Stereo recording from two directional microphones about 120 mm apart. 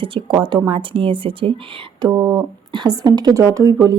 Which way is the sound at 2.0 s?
30° right (ahead or behind).